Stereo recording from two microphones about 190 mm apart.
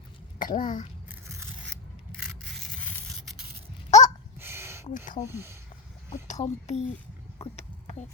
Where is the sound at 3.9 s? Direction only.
40° left (ahead or behind).